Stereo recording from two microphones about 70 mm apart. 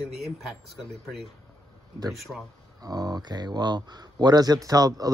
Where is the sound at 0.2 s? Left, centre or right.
Centre.